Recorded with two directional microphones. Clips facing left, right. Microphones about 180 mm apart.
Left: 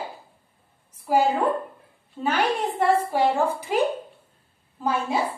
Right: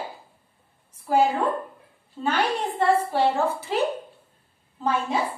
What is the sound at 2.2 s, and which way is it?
A woman's voice, 10° left (ahead or behind).